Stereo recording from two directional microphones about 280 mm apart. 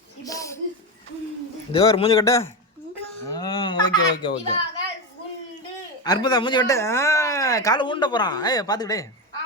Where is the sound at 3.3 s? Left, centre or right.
Centre.